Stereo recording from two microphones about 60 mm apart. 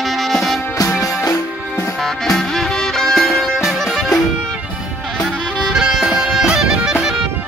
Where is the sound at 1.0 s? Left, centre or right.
Left.